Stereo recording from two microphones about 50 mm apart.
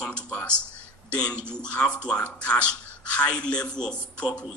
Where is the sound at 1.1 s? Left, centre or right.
Left.